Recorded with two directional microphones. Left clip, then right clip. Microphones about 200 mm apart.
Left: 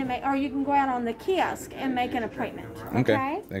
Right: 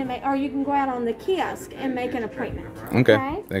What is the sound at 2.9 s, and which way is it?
Speech, 25° right (ahead or behind).